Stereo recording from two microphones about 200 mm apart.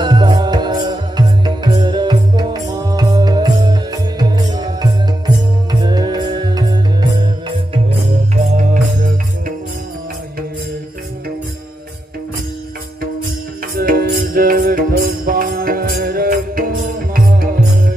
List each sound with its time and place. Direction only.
0.0 s music: 20° right (ahead or behind)
8.5 s music: 40° right (ahead or behind)
13.7 s music: 50° right (ahead or behind)